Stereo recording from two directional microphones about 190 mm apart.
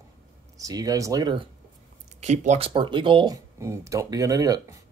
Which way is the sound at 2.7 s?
25° right (ahead or behind).